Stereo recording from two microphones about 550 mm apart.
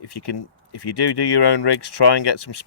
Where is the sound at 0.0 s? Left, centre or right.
Left.